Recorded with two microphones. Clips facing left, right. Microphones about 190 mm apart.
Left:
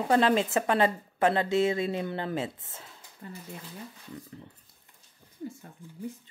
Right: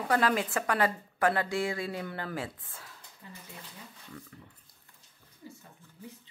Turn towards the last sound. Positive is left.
turn(degrees=15)  # may be behind; listen again after turning